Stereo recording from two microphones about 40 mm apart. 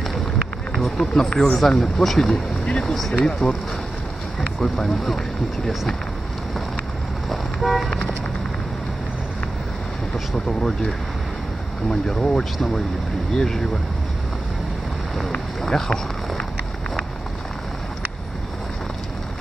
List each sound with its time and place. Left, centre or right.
0.7 s speech: centre
1.8 s speech: centre
2.6 s speech: left
2.9 s speech: centre
3.2 s speech: left
7.2 s vehicle: centre
10.3 s speech: centre
11.9 s speech: centre
15.6 s a sound: centre